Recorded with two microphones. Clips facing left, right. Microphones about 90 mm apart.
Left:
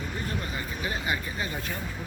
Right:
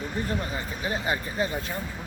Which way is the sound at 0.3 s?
30° right (ahead or behind).